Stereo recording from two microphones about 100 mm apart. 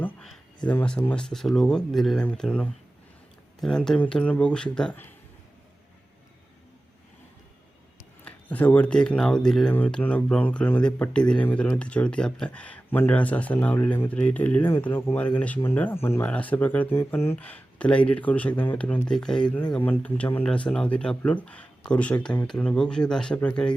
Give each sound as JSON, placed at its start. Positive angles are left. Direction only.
{"t": 0.7, "sound": "speech", "side_deg": 15}
{"t": 8.2, "sound": "speech", "side_deg": 15}
{"t": 17.3, "sound": "speech", "side_deg": 15}